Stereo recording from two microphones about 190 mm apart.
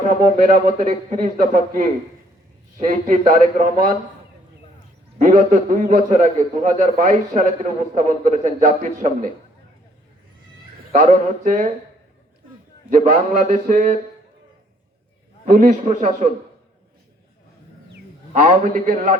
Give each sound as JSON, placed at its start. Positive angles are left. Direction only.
{"t": 0.5, "sound": "a man's voice", "side_deg": -45}
{"t": 5.2, "sound": "a man's voice", "side_deg": -40}
{"t": 10.9, "sound": "a man's voice", "side_deg": -40}
{"t": 12.9, "sound": "a man's voice", "side_deg": -40}
{"t": 15.4, "sound": "a man's voice", "side_deg": -45}
{"t": 18.3, "sound": "a man's voice", "side_deg": -40}